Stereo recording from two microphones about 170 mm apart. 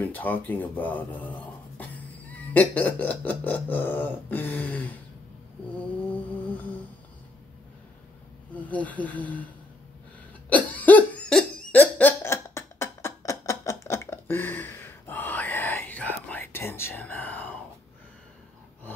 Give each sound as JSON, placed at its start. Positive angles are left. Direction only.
{"t": 0.0, "sound": "speech", "side_deg": 10}
{"t": 6.4, "sound": "humming", "side_deg": 10}
{"t": 8.6, "sound": "speech", "side_deg": 10}
{"t": 10.5, "sound": "cough", "side_deg": 10}